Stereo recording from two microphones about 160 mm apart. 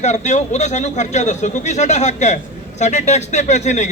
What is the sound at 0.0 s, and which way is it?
Speech, 45° left (ahead or behind).